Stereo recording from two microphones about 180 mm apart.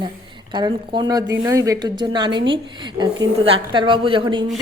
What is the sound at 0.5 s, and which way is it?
A woman's voice, 25° right (ahead or behind).